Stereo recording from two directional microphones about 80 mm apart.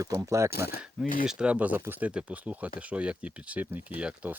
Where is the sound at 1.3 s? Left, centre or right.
Centre.